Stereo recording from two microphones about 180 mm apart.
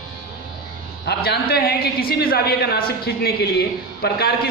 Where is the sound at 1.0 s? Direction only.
65° left (ahead or behind).